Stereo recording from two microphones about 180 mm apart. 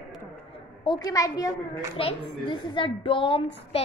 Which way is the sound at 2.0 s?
30° left (ahead or behind).